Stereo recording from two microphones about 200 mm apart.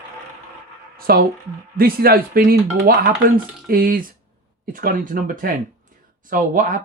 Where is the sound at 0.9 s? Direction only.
50° right (ahead or behind).